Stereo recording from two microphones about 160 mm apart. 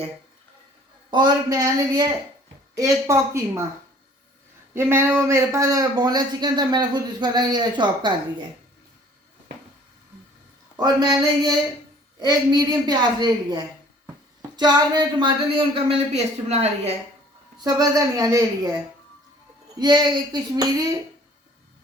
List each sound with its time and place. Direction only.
1.1 s speech: 25° right (ahead or behind)
4.7 s speech: 15° right (ahead or behind)
10.8 s speech: 25° right (ahead or behind); by 16.9 s 40° right (ahead or behind)
17.6 s speech: 25° right (ahead or behind)
19.8 s speech: 25° right (ahead or behind)